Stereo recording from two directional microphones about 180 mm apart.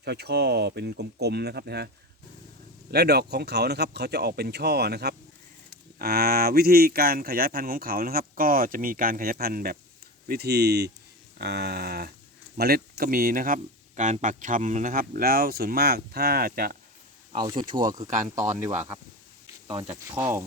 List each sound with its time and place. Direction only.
0.0 s speech: 65° right (ahead or behind)
2.9 s speech: 65° right (ahead or behind)
17.3 s speech: 25° right (ahead or behind)
18.4 s speech: 40° right (ahead or behind)
19.6 s speech: 20° right (ahead or behind)